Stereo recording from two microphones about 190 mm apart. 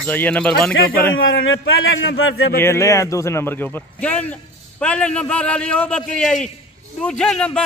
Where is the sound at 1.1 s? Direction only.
90° left.